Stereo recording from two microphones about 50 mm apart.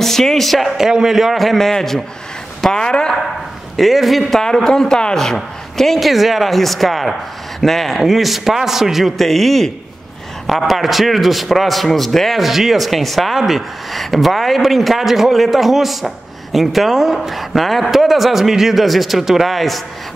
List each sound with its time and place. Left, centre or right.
0.0 s a woman's voice: centre
0.7 s a man's voice: centre
3.7 s a man's voice: centre
4.4 s a man's voice: centre